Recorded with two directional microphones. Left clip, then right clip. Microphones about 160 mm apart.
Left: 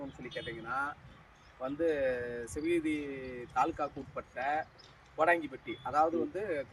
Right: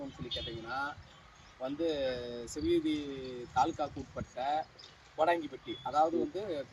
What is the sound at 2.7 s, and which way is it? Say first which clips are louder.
Speech: right 1 dB; centre (ahead or behind).